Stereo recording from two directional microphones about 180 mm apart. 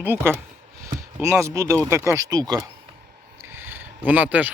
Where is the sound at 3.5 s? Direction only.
10° right (ahead or behind).